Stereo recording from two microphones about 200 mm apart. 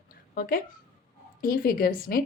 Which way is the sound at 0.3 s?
45° left (ahead or behind).